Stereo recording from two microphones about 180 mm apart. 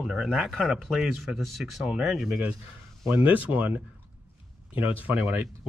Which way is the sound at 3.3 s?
10° right (ahead or behind).